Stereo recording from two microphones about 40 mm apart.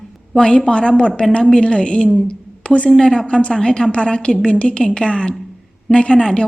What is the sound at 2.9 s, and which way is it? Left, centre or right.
A woman's voice, centre.